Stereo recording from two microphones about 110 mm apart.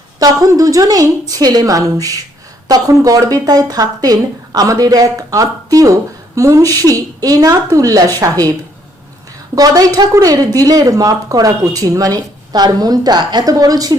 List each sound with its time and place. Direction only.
0.2 s speech: 30° right (ahead or behind)
9.6 s speech: 35° right (ahead or behind)